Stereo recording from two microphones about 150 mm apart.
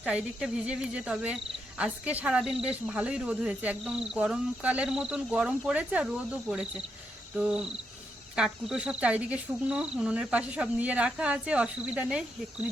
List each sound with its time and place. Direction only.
0.0 s speech: 5° right (ahead or behind)
8.4 s cricket: 5° right (ahead or behind)